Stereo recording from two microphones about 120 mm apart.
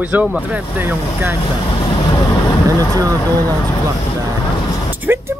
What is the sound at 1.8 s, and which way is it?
Vehicle, 35° left (ahead or behind).